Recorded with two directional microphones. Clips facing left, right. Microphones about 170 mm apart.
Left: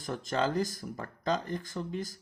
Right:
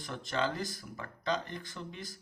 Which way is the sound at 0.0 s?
45° left (ahead or behind).